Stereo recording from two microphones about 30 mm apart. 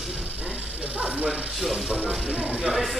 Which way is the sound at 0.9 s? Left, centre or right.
Right.